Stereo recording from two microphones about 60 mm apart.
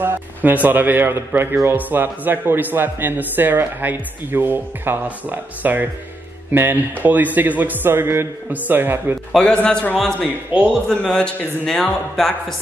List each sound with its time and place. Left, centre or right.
0.0 s speech: right
9.4 s a man's voice: left
10.5 s speech: right
10.9 s a man's voice: centre